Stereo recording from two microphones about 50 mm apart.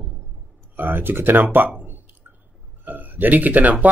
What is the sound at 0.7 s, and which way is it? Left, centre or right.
Speech, right.